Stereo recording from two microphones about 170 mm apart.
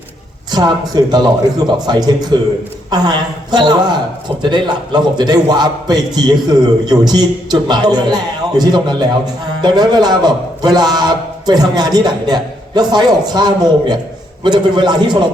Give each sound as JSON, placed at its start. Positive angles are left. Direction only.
{"t": 0.5, "sound": "a man's voice", "side_deg": -25}